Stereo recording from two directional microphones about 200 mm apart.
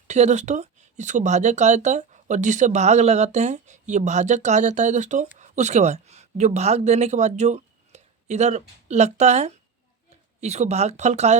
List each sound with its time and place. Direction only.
0.1 s speech: 35° right (ahead or behind)